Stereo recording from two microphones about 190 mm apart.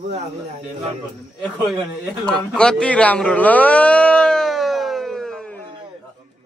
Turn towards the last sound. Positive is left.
turn(degrees=5)  # may be behind; listen again after turning